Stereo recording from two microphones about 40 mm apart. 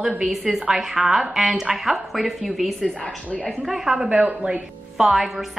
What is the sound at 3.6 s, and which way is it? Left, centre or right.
A woman's voice, centre.